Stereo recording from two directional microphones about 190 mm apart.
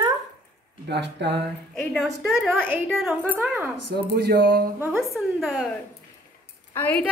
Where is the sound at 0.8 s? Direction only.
65° right (ahead or behind).